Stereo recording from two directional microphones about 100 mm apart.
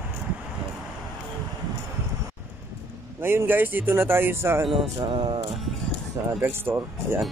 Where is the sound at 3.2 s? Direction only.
25° right (ahead or behind).